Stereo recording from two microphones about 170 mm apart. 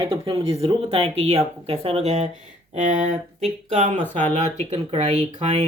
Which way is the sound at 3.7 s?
40° right (ahead or behind).